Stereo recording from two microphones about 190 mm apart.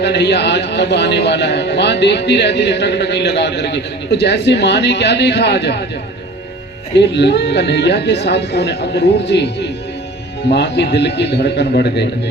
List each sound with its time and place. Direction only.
0.0 s a man's voice: 60° left (ahead or behind)
6.9 s a man's voice: 65° left (ahead or behind)